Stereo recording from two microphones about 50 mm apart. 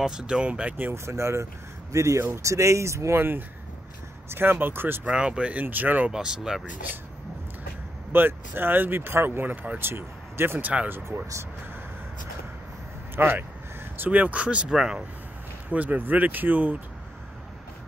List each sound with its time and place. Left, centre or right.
0.0 s speech: centre
0.9 s speech: right
3.2 s speech: right
5.0 s speech: right
5.7 s speech: right
6.1 s speech: centre
8.1 s speech: right
10.6 s speech: right
13.1 s speech: right
14.8 s speech: centre
15.7 s speech: right